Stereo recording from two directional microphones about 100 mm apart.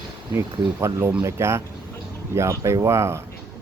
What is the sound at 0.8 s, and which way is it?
Speech, 30° right (ahead or behind).